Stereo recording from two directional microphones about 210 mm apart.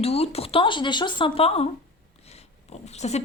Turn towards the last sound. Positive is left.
turn(degrees=30)  # may be behind; listen again after turning